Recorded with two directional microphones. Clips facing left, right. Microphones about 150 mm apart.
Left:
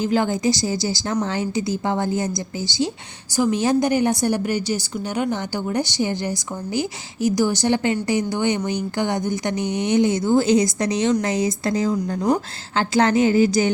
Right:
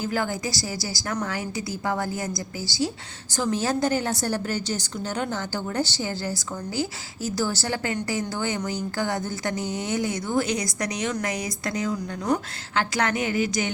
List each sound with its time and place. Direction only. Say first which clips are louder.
0.0 s a woman's voice: left 7 dB; 20° left (ahead or behind)